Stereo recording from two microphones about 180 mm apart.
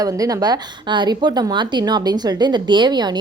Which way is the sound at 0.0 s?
20° right (ahead or behind).